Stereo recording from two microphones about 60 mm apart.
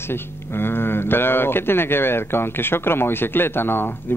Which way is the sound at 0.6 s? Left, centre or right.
Left.